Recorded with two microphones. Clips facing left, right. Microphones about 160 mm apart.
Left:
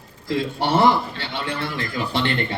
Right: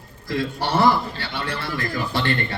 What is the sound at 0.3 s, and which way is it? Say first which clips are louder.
A man's voice: left 2 dB; 25° left (ahead or behind).